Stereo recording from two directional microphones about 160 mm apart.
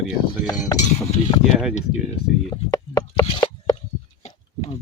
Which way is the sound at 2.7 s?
25° left (ahead or behind).